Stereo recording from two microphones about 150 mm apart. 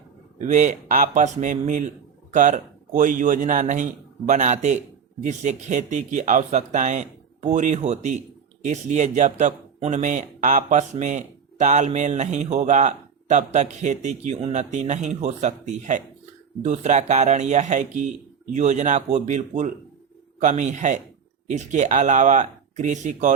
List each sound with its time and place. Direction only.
0.3 s a man's voice: 55° right (ahead or behind)